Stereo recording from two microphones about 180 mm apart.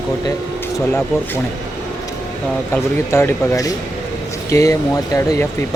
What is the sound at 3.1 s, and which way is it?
Speech, 15° left (ahead or behind).